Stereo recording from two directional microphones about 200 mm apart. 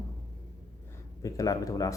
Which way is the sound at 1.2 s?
15° left (ahead or behind).